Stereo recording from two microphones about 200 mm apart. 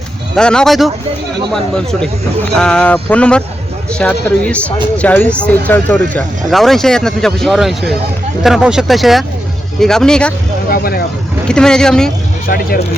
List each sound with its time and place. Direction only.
0.3 s speech: 5° left (ahead or behind)
10.7 s speech: 50° left (ahead or behind)
11.4 s speech: 5° left (ahead or behind)